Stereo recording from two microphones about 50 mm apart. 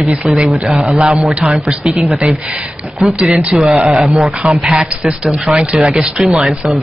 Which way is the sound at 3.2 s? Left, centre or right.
Right.